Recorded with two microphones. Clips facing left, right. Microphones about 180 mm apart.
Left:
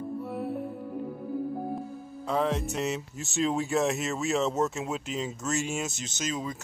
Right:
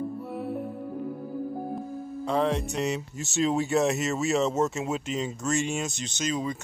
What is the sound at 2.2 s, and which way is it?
Speech, centre (ahead or behind).